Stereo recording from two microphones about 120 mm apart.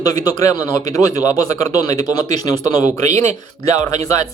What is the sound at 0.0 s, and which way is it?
A man's voice, 30° left (ahead or behind).